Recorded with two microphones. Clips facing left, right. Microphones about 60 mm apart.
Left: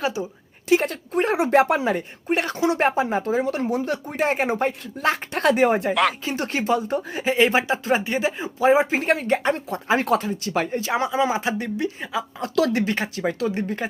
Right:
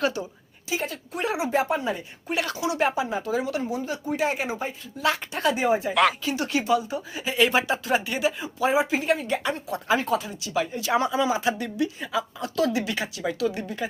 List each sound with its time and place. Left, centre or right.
0.0 s a woman's voice: centre
0.7 s speech: left
1.1 s speech: left
2.3 s speech: left
3.3 s speech: left
3.6 s speech: left
5.3 s speech: left
5.9 s speech: centre
6.2 s speech: left
7.3 s speech: left
10.0 s speech: left
10.2 s speech: left
10.8 s speech: left